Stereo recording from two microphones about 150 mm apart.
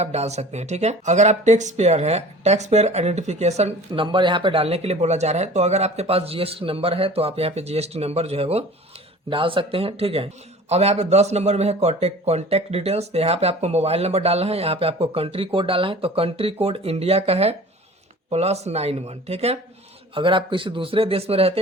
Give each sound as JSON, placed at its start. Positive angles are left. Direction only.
{"t": 0.0, "sound": "speech", "side_deg": -45}